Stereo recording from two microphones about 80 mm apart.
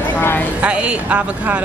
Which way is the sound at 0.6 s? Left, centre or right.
Centre.